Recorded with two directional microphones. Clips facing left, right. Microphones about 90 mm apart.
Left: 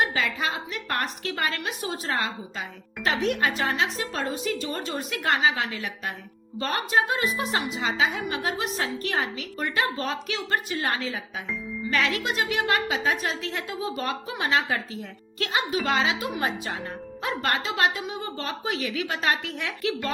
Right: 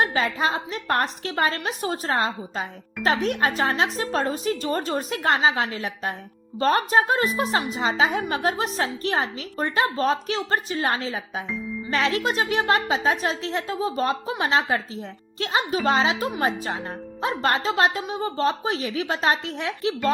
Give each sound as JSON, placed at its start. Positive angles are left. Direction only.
{"t": 0.0, "sound": "a woman's voice", "side_deg": -35}